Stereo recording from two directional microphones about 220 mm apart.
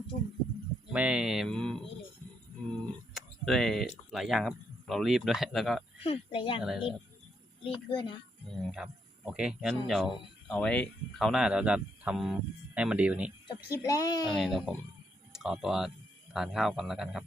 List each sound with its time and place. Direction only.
0.9 s speech: 5° right (ahead or behind)
6.0 s speech: 25° left (ahead or behind)
6.6 s speech: 5° right (ahead or behind)
7.6 s speech: 25° left (ahead or behind)
8.4 s speech: centre (ahead or behind)
13.7 s a child's voice: 15° left (ahead or behind)
14.3 s speech: centre (ahead or behind)